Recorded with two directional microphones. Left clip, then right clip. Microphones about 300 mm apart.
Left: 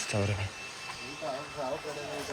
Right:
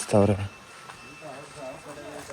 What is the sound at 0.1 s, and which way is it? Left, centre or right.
Speech, right.